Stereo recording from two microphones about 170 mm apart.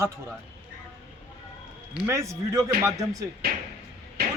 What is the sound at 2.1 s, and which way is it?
Speech, 20° right (ahead or behind).